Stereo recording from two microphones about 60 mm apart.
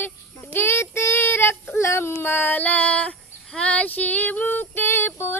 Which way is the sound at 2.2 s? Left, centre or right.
Left.